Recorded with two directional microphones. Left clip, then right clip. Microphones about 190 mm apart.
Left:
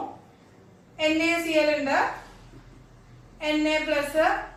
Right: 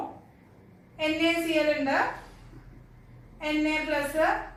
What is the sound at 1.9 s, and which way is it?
Speech, centre (ahead or behind).